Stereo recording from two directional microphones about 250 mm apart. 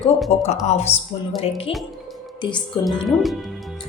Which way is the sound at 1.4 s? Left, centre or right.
Left.